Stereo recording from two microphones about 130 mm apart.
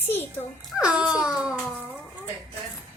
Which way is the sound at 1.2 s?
5° right (ahead or behind).